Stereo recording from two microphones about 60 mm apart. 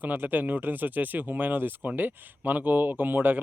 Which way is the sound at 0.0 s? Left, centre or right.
Right.